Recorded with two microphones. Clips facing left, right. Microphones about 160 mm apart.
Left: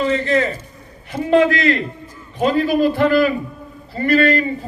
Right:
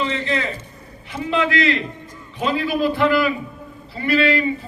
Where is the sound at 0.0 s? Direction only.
50° left (ahead or behind).